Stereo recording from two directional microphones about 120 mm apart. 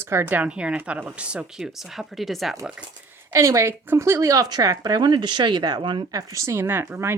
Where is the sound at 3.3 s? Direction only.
25° right (ahead or behind).